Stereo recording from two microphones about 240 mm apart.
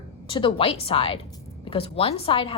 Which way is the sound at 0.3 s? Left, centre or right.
Left.